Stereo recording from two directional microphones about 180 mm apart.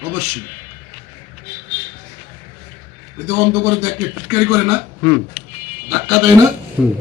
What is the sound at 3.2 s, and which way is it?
A man's voice, 15° right (ahead or behind).